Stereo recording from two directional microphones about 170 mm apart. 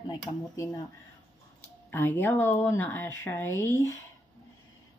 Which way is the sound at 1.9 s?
15° left (ahead or behind).